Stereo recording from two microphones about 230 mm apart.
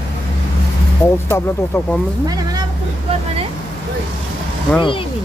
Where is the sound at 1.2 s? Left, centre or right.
Centre.